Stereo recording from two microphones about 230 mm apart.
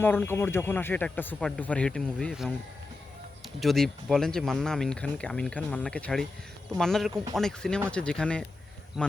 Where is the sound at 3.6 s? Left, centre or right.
Centre.